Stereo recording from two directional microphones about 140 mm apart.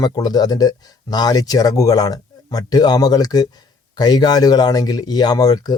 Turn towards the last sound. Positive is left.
turn(degrees=30)  # may be behind; listen again after turning